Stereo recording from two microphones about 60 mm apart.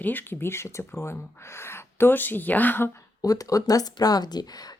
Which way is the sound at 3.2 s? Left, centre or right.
Left.